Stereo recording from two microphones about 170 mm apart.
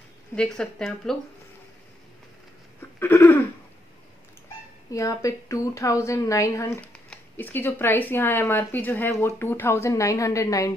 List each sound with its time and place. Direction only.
0.4 s speech: 5° left (ahead or behind)
3.0 s a woman's voice: 15° left (ahead or behind)
4.9 s a woman's voice: 20° left (ahead or behind)